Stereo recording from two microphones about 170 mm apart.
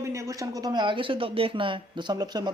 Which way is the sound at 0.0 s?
20° right (ahead or behind).